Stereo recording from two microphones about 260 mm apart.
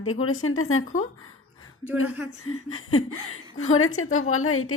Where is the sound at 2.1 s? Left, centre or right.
Centre.